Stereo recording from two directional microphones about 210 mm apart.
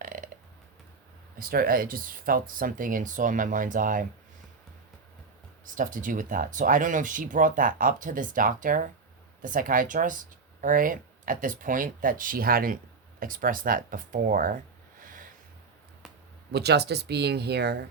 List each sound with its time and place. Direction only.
0.0 s burping: 40° right (ahead or behind)
1.4 s speech: 45° right (ahead or behind)
5.6 s speech: 40° right (ahead or behind)
15.0 s a sound: 40° right (ahead or behind)
16.5 s speech: 50° right (ahead or behind)